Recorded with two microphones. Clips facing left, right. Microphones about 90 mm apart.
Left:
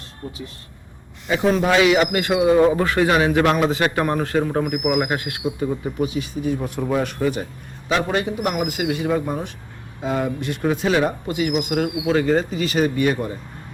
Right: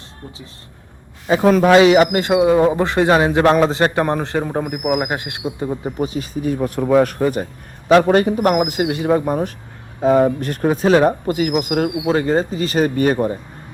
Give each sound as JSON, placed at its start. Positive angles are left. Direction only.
{"t": 1.5, "sound": "a man's voice", "side_deg": -55}
{"t": 2.1, "sound": "a man's voice", "side_deg": -25}